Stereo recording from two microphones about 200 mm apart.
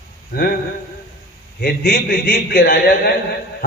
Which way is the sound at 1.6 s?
45° left (ahead or behind).